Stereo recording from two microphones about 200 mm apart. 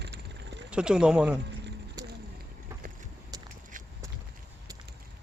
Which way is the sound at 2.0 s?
20° right (ahead or behind).